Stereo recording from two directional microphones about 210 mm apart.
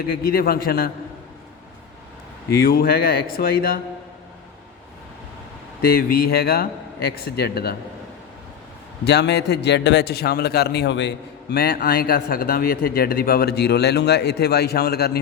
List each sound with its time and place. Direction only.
0.2 s a man's voice: 45° left (ahead or behind)
2.6 s a man's voice: 45° left (ahead or behind)
5.8 s a man's voice: 45° left (ahead or behind)
9.0 s a man's voice: 55° left (ahead or behind)